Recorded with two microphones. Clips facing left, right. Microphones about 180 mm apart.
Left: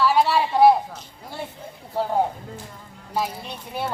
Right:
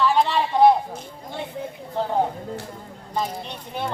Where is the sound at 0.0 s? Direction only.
10° left (ahead or behind).